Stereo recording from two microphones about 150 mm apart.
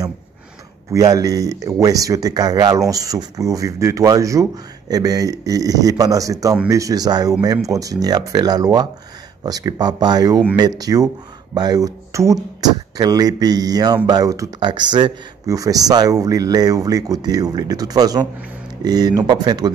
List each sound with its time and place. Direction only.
0.9 s speech: 25° right (ahead or behind)